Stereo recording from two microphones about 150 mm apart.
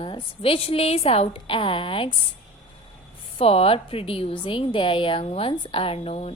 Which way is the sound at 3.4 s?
40° left (ahead or behind).